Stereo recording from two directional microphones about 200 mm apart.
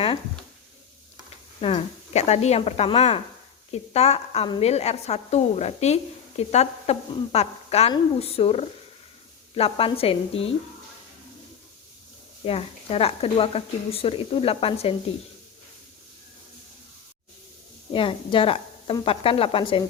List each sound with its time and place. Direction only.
1.6 s a woman's voice: 30° left (ahead or behind)
12.5 s speech: 30° left (ahead or behind)
17.9 s speech: 25° left (ahead or behind)